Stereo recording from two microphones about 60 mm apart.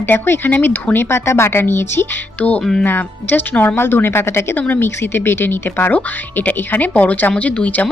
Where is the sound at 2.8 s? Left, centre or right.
Left.